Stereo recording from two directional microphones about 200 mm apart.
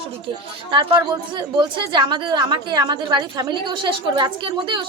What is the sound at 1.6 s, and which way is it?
Speech, 20° right (ahead or behind).